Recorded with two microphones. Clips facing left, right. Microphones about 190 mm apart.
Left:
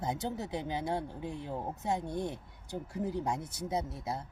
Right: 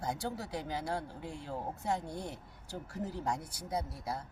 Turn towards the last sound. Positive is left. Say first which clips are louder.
# left 2 dB
turn(degrees=25)  # may be behind; listen again after turning